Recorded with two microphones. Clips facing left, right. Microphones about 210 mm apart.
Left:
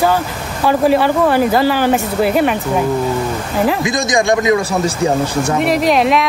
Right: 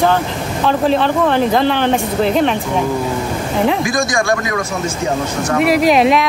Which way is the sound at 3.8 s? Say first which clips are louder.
Left 1 dB; 20° left (ahead or behind).